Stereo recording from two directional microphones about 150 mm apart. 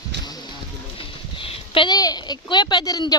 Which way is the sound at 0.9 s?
35° left (ahead or behind).